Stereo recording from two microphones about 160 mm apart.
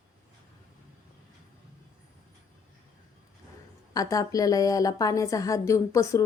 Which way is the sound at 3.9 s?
20° left (ahead or behind).